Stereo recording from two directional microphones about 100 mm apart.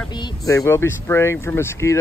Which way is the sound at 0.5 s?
30° left (ahead or behind).